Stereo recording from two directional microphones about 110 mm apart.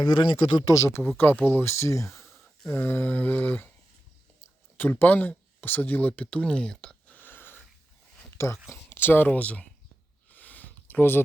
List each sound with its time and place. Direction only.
0.0 s speech: 45° left (ahead or behind)
0.7 s speech: 25° left (ahead or behind)
2.6 s mantra: 20° left (ahead or behind)
4.8 s speech: 15° left (ahead or behind)
10.2 s a sound: 15° left (ahead or behind)